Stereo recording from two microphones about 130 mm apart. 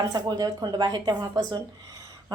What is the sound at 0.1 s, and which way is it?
A woman's voice, 30° right (ahead or behind).